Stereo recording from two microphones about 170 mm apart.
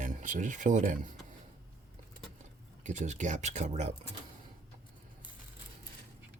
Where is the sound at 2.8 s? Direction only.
45° right (ahead or behind).